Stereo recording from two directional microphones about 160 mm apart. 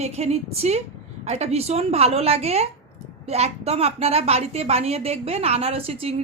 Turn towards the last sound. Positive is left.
turn(degrees=-35)  # may be behind; listen again after turning